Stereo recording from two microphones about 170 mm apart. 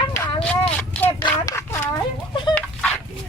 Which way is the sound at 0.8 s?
10° left (ahead or behind).